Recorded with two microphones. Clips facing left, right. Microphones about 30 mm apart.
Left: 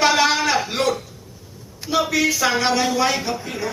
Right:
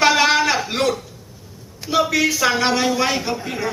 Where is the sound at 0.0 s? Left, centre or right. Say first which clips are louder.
Right 2 dB; centre.